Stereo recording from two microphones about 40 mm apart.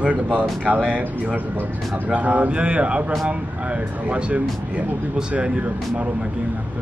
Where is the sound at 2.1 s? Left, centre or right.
Right.